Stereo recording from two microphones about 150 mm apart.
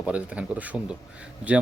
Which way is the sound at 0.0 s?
10° right (ahead or behind).